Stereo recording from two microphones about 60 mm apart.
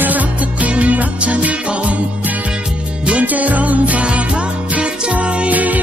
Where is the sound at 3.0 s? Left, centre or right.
Right.